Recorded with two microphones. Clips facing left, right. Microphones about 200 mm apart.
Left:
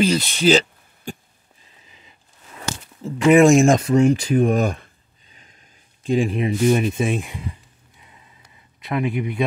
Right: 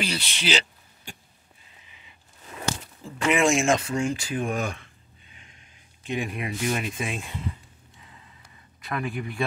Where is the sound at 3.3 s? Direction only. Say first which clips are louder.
Left 9 dB; 40° left (ahead or behind).